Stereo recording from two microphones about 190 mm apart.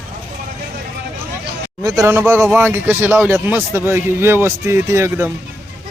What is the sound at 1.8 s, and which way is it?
Speech, 15° right (ahead or behind).